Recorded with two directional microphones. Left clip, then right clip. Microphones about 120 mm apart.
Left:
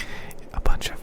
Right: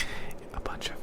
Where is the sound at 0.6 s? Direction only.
40° left (ahead or behind).